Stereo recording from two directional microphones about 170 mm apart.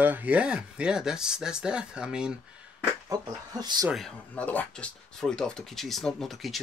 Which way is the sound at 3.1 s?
20° right (ahead or behind).